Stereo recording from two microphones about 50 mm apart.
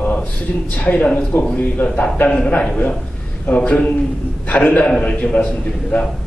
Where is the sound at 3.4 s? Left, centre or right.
Left.